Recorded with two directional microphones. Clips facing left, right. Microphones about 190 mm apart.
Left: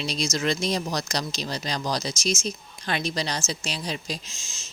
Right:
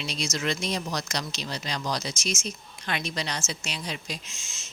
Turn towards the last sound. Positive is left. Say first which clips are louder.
# left 3 dB
turn(degrees=35)  # may be behind; listen again after turning